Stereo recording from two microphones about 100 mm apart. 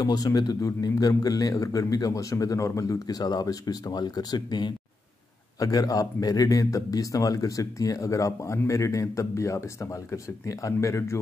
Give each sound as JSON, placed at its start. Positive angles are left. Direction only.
{"t": 0.0, "sound": "speech", "side_deg": 40}